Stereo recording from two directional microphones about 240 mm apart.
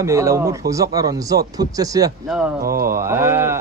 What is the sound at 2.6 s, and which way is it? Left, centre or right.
Mantra, right.